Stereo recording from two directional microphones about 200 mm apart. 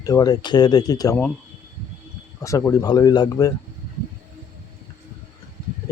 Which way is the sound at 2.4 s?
15° left (ahead or behind).